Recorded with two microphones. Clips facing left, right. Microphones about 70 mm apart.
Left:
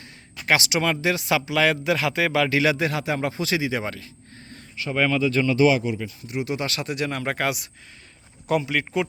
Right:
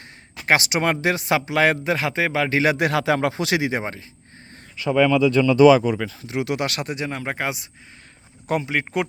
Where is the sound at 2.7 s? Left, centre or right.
Right.